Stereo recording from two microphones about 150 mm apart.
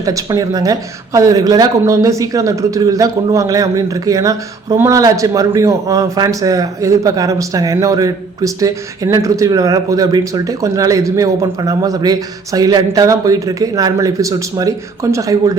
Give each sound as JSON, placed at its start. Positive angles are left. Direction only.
{"t": 0.0, "sound": "speech", "side_deg": -20}